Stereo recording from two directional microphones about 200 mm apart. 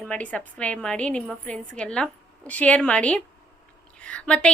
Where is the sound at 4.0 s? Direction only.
5° left (ahead or behind).